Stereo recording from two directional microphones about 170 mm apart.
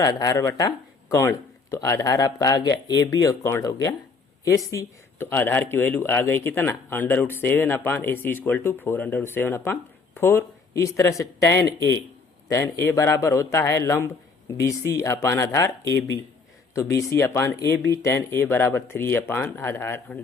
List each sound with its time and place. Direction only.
0.0 s speech: 20° left (ahead or behind)
16.7 s speech: 15° left (ahead or behind)